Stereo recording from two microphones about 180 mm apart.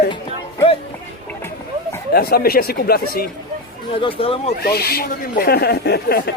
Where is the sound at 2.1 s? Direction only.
60° left (ahead or behind).